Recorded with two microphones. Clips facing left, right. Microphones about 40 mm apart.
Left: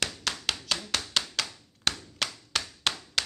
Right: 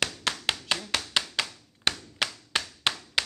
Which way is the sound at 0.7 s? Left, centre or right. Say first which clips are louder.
Right 2 dB; centre.